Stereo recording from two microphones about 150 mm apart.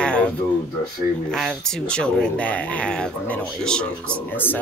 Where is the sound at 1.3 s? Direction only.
5° left (ahead or behind).